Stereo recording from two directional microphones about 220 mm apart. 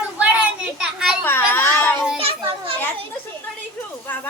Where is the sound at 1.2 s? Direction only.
10° left (ahead or behind).